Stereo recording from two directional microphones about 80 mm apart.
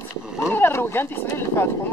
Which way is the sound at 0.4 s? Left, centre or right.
Left.